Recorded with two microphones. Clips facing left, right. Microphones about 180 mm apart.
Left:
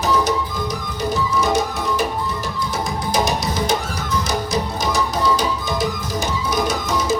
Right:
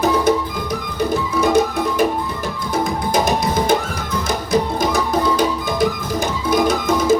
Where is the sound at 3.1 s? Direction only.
55° right (ahead or behind).